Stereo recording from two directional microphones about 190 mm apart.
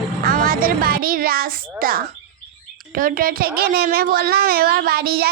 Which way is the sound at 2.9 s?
50° right (ahead or behind).